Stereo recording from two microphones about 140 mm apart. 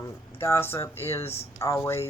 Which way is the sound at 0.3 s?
15° left (ahead or behind).